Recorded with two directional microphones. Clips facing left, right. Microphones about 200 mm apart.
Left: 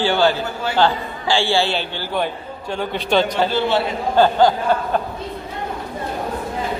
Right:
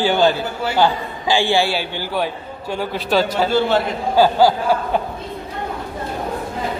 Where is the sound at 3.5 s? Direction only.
45° right (ahead or behind).